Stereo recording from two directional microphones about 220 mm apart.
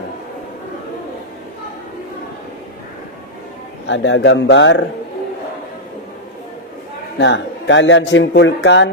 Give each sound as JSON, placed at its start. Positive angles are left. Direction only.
{"t": 3.8, "sound": "speech", "side_deg": 55}
{"t": 7.2, "sound": "speech", "side_deg": 55}